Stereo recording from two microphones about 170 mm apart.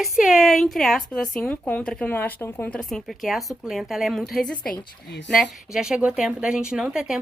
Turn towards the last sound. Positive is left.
turn(degrees=-5)  # may be behind; listen again after turning